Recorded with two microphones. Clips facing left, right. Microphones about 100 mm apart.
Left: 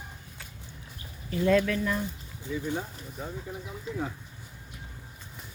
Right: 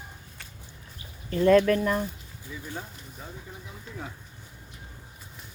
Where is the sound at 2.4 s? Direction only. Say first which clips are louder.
Left 7 dB; 20° left (ahead or behind).